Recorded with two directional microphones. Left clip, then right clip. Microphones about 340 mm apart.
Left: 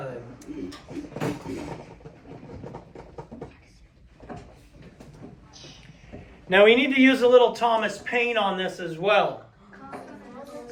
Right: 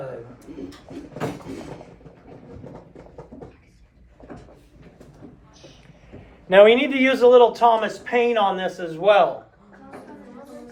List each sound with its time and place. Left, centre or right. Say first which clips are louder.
6.5 s a man's voice: right 4 dB; centre